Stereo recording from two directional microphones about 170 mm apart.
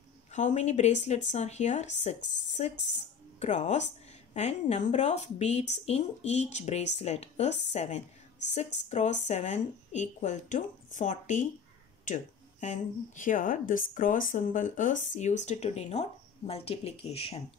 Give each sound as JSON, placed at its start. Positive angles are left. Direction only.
{"t": 0.3, "sound": "a woman's voice", "side_deg": 45}